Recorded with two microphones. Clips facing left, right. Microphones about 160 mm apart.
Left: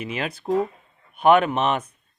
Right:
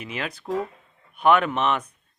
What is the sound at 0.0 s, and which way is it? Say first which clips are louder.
Speech: left 4 dB; 20° left (ahead or behind).